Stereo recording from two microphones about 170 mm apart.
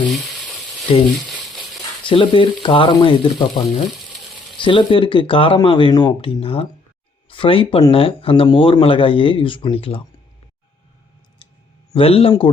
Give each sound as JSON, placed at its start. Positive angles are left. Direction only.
{"t": 0.1, "sound": "frying", "side_deg": -5}
{"t": 2.0, "sound": "speech", "side_deg": 30}
{"t": 11.9, "sound": "speech", "side_deg": 35}